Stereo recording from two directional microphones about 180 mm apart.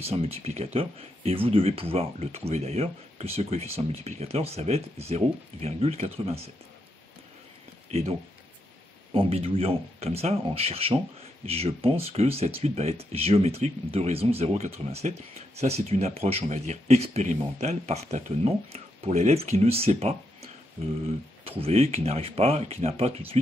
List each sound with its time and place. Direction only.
0.0 s speech: 35° right (ahead or behind)
9.1 s speech: 30° right (ahead or behind)
21.5 s speech: 30° right (ahead or behind)